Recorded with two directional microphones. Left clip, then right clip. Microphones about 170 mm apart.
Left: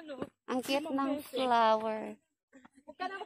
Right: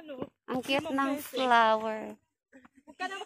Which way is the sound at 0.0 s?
20° right (ahead or behind).